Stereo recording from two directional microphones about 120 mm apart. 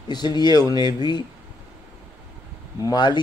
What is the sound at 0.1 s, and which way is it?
Speech, 35° left (ahead or behind).